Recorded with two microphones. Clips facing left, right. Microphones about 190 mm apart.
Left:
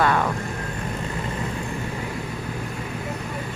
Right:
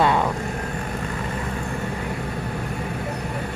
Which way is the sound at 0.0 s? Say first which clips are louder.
Right 1 dB; 20° right (ahead or behind).